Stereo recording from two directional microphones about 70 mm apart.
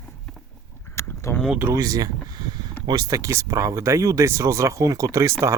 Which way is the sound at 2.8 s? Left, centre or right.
Right.